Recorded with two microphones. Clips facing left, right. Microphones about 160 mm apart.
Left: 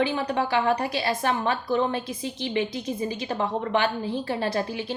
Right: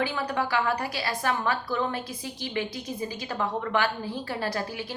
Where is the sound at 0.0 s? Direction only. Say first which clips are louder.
Left 4 dB; 25° left (ahead or behind).